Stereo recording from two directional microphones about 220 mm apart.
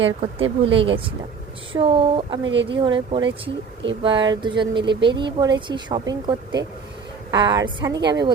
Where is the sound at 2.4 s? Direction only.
55° right (ahead or behind).